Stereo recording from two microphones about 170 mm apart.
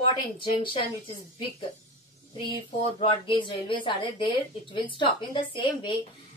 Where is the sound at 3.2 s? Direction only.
30° left (ahead or behind).